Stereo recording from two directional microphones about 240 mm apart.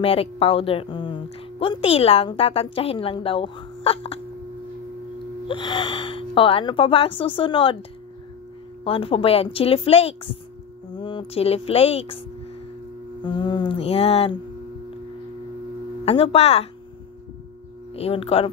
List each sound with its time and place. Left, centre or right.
0.0 s a woman's voice: left
5.5 s a woman's voice: centre
8.8 s a woman's voice: left
13.2 s a woman's voice: centre
16.1 s a woman's voice: left
17.9 s a woman's voice: left